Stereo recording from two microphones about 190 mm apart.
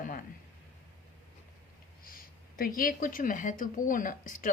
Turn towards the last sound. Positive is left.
turn(degrees=45)  # may be behind; listen again after turning